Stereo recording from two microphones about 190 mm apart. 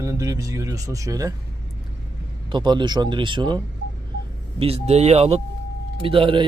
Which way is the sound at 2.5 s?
25° right (ahead or behind).